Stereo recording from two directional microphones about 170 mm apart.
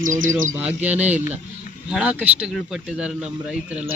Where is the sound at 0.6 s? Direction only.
10° right (ahead or behind).